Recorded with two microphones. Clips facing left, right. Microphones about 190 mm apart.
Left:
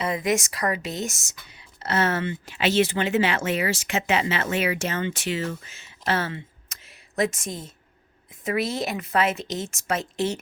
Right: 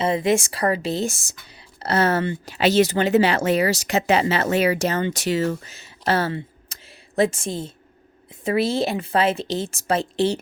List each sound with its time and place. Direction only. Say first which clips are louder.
0.0 s speech: right 5 dB; 30° right (ahead or behind)
6.1 s a sound: right 5 dB; 35° right (ahead or behind)
8.4 s speech: right 5 dB; 30° right (ahead or behind)